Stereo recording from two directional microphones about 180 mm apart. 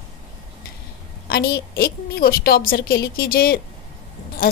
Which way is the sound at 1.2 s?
60° left (ahead or behind).